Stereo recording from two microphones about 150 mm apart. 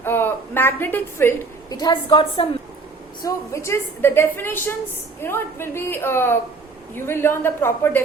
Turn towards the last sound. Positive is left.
turn(degrees=15)  # may be behind; listen again after turning